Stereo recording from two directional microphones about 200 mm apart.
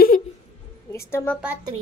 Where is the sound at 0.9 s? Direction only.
15° left (ahead or behind).